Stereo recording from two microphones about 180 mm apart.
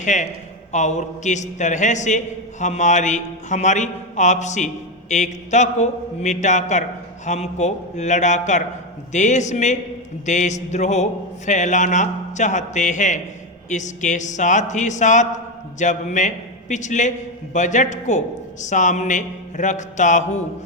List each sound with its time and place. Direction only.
0.0 s a man's voice: 45° left (ahead or behind)